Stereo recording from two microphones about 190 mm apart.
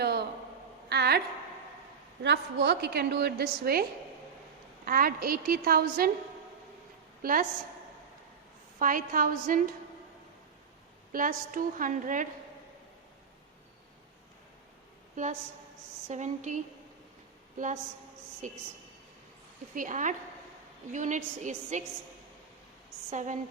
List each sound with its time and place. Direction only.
0.0 s a sound: 55° right (ahead or behind)
2.2 s a woman's voice: 65° right (ahead or behind)
4.9 s a woman's voice: 50° right (ahead or behind)
7.2 s a woman's voice: 45° right (ahead or behind)
8.8 s a woman's voice: 45° right (ahead or behind)
11.1 s a woman's voice: 45° right (ahead or behind)
15.1 s a woman's voice: 40° right (ahead or behind)
18.4 s a woman's voice: 40° right (ahead or behind)
19.7 s a woman's voice: 45° right (ahead or behind)
23.0 s a woman's voice: 40° right (ahead or behind)